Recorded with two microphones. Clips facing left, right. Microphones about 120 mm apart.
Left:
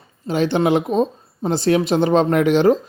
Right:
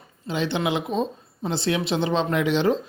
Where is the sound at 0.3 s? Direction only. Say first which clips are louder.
Left 7 dB; 45° left (ahead or behind).